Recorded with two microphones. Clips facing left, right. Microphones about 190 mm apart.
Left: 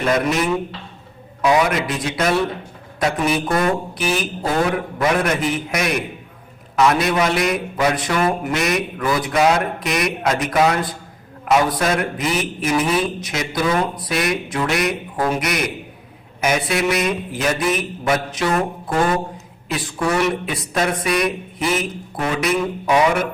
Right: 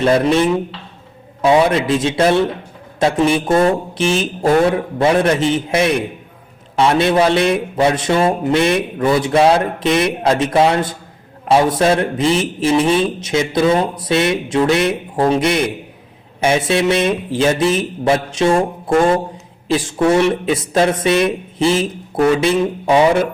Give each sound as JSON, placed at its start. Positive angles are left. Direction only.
{"t": 0.0, "sound": "a man's voice", "side_deg": -30}
{"t": 19.6, "sound": "a man's voice", "side_deg": -30}